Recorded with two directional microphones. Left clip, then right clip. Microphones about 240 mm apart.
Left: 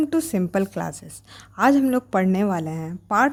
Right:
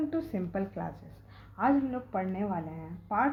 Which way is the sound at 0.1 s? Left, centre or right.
Left.